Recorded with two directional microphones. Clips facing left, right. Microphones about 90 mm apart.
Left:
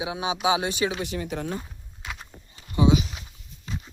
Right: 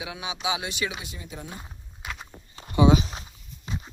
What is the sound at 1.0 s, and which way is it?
Speech, 70° left (ahead or behind).